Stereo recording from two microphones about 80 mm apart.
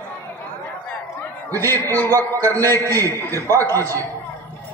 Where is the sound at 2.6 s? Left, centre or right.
Right.